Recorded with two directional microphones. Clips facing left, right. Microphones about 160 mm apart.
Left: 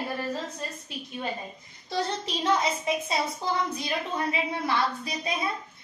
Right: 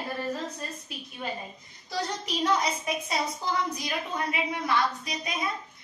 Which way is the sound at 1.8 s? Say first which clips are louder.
Left 2 dB; 25° left (ahead or behind).